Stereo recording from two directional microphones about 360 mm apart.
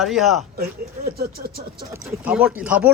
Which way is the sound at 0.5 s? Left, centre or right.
Right.